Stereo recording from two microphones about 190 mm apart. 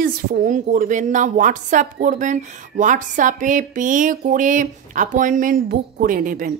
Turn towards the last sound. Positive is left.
turn(degrees=-45)  # may be behind; listen again after turning